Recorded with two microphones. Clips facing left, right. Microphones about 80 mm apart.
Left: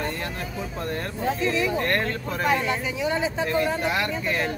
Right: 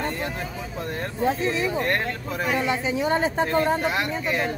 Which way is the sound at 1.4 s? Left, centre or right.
Right.